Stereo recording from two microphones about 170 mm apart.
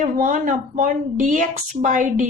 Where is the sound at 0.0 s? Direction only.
50° right (ahead or behind).